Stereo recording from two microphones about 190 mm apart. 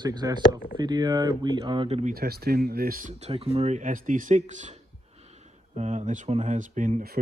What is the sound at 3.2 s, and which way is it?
Speech, 35° right (ahead or behind).